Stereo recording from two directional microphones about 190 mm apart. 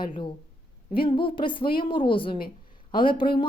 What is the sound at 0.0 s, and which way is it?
A woman's voice, 25° left (ahead or behind).